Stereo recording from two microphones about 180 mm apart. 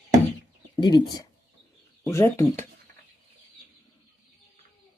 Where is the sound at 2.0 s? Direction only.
15° left (ahead or behind).